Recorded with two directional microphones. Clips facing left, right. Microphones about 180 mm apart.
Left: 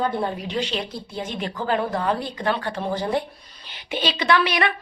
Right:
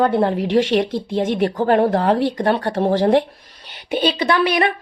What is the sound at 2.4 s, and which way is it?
Speech, 45° right (ahead or behind).